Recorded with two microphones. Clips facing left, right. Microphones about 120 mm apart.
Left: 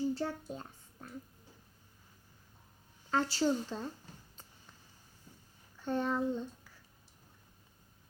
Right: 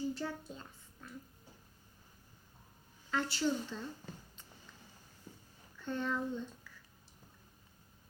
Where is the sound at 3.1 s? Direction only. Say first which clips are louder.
Left 3 dB; 35° left (ahead or behind).